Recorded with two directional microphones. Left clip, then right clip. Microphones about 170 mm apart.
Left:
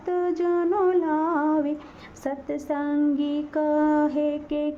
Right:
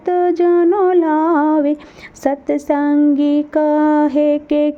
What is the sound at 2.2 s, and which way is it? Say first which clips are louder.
Speech: right 12 dB; 45° right (ahead or behind).